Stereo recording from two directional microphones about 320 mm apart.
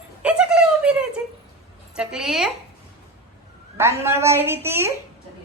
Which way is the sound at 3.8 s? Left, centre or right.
Centre.